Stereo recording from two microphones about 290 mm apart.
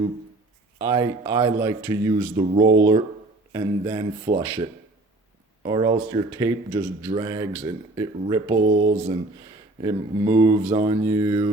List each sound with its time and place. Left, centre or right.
0.8 s speech: centre
5.6 s speech: centre